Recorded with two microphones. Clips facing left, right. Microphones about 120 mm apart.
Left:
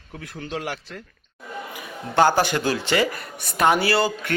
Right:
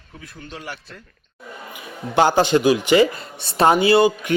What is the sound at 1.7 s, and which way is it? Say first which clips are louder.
A man's voice: right 3 dB; 15° right (ahead or behind).